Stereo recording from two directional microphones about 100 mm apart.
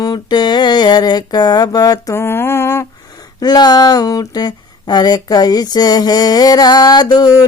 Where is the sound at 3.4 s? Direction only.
45° left (ahead or behind).